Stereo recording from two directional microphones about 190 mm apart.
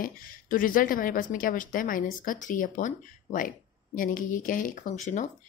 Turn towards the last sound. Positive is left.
turn(degrees=40)  # may be behind; listen again after turning